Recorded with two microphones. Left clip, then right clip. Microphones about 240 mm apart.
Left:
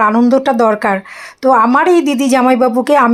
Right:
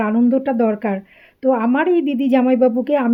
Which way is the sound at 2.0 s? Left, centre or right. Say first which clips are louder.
Left 6 dB; left.